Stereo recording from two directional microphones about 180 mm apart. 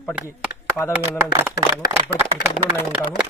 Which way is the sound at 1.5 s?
65° left (ahead or behind).